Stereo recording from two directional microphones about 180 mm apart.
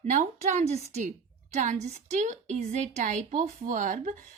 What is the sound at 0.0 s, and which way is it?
A woman's voice, 40° right (ahead or behind).